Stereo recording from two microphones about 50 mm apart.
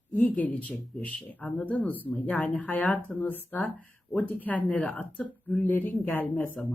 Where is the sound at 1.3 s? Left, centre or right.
Left.